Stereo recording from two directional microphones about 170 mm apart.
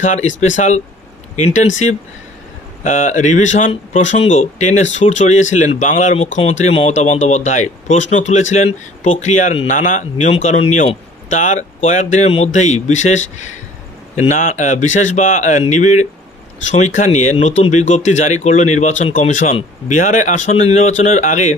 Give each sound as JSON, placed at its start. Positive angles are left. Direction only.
{"t": 0.0, "sound": "speech", "side_deg": 45}
{"t": 2.8, "sound": "speech", "side_deg": 45}